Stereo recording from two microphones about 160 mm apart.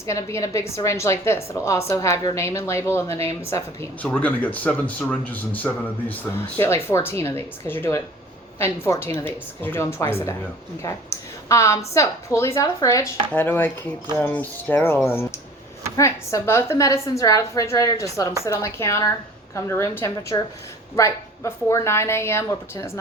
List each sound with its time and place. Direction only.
0.0 s a man's voice: 20° left (ahead or behind)